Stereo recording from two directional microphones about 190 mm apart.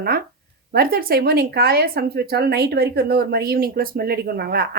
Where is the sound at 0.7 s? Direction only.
50° right (ahead or behind).